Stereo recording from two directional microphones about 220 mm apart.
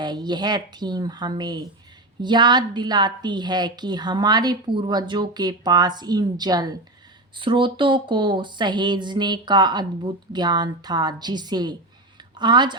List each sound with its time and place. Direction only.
0.0 s a woman's voice: 20° right (ahead or behind)